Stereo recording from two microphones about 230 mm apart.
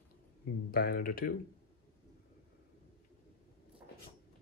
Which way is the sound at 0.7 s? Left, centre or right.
Left.